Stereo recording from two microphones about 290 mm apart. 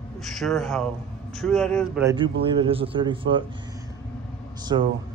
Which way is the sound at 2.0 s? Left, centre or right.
Centre.